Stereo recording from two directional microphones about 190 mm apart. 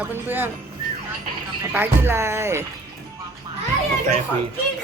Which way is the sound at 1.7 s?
10° right (ahead or behind).